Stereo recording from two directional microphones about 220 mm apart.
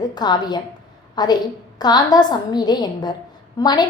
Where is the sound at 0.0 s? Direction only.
20° left (ahead or behind).